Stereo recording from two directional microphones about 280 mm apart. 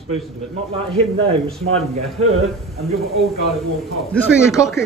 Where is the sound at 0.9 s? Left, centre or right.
Right.